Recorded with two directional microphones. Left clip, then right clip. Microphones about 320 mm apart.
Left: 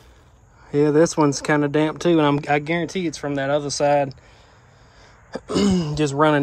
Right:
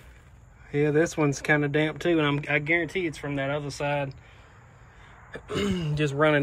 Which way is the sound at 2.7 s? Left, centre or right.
Left.